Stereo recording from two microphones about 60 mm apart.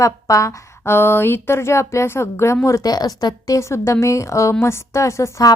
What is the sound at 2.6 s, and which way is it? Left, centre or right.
Speech, left.